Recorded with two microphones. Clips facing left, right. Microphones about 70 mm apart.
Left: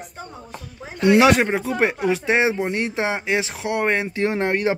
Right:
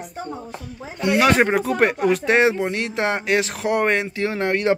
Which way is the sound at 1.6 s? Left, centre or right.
Centre.